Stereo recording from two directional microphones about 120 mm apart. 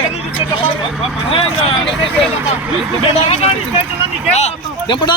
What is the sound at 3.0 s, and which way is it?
Speech, 50° left (ahead or behind).